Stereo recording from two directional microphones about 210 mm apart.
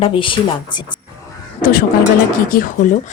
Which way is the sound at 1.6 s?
45° left (ahead or behind).